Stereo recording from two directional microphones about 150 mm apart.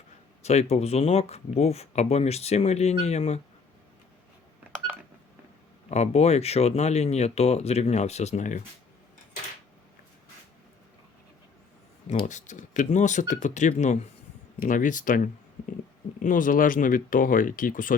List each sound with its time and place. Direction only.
0.4 s speech: 45° left (ahead or behind)
5.9 s speech: 45° left (ahead or behind)
12.2 s speech: 55° left (ahead or behind)
14.6 s speech: 60° left (ahead or behind)